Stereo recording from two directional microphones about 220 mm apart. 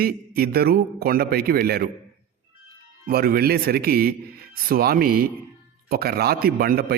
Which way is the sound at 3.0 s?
45° right (ahead or behind).